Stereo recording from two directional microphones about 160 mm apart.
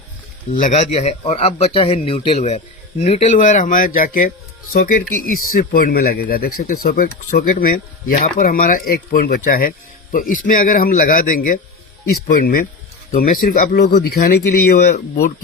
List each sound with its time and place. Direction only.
0.5 s speech: 50° left (ahead or behind); by 14.3 s 85° left
14.5 s speech: 70° left (ahead or behind)